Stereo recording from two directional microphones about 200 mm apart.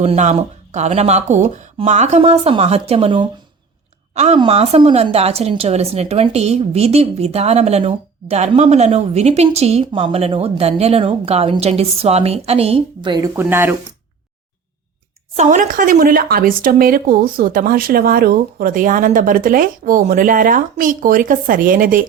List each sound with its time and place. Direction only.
0.0 s a woman's voice: 30° right (ahead or behind); by 13.7 s 10° right (ahead or behind)
15.4 s speech: 40° right (ahead or behind)